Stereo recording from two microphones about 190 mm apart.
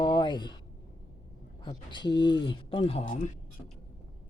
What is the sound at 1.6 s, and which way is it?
Speech, 25° left (ahead or behind).